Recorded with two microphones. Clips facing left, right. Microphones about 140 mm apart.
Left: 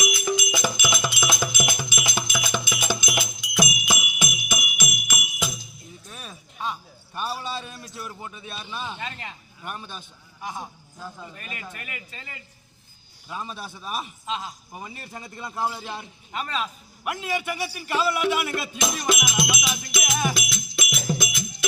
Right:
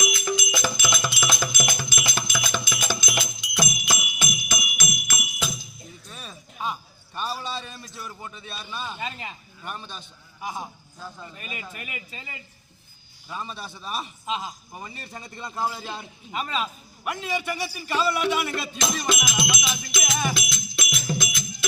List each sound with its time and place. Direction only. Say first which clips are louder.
0.0 s music: left 1 dB; 10° left (ahead or behind)
2.3 s jingle bell: left 1 dB; 10° left (ahead or behind)
6.1 s a sound: left 1 dB; 10° left (ahead or behind)
8.9 s a man's voice: right 1 dB; 5° right (ahead or behind)
9.6 s speech: left 1 dB; 10° left (ahead or behind)
10.4 s a man's voice: right 1 dB; 5° right (ahead or behind)
11.0 s speech: left 1 dB; 10° left (ahead or behind)
11.3 s speech: right 1 dB; 10° right (ahead or behind); by 14.1 s 10° left (ahead or behind)
14.3 s a man's voice: right 1 dB; 5° right (ahead or behind)
17.1 s speech: even; 10° left (ahead or behind)
19.9 s music: left 1 dB; 10° left (ahead or behind)